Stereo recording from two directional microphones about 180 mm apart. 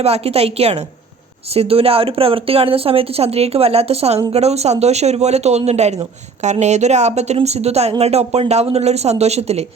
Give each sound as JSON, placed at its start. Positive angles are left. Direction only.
{"t": 0.0, "sound": "speech", "side_deg": -35}